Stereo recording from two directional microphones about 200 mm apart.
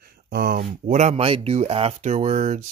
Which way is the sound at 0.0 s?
50° right (ahead or behind).